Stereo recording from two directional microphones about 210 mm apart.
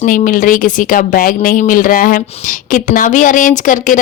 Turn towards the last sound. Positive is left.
turn(degrees=40)  # may be behind; listen again after turning